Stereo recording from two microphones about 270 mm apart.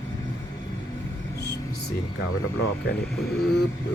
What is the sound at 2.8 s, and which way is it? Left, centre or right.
Speech, left.